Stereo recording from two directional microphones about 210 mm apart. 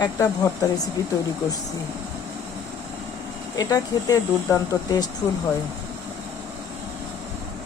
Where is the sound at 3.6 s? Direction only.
15° left (ahead or behind).